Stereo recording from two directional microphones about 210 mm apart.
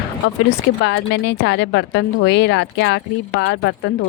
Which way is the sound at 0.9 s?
55° left (ahead or behind).